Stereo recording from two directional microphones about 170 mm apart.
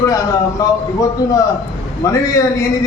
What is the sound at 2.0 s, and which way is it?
Speech, 20° left (ahead or behind).